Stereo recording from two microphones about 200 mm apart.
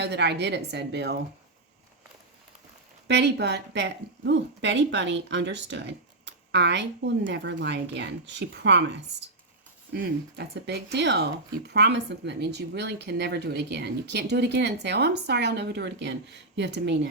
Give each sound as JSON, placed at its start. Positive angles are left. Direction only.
{"t": 0.0, "sound": "speech", "side_deg": -60}
{"t": 3.1, "sound": "speech", "side_deg": -55}
{"t": 9.9, "sound": "speech", "side_deg": -55}